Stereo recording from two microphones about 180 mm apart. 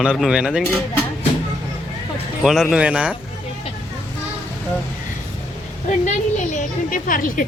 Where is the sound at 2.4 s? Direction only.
Centre (ahead or behind).